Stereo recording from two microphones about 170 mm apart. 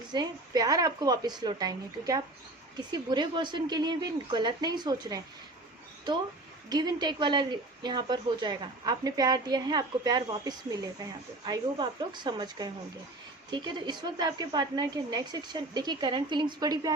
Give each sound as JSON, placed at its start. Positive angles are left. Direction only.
{"t": 0.1, "sound": "speech", "side_deg": -25}
{"t": 6.7, "sound": "speech", "side_deg": -25}